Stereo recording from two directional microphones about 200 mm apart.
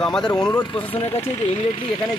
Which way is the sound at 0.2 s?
20° left (ahead or behind).